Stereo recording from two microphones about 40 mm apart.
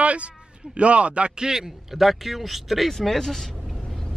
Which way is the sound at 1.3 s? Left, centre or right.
Centre.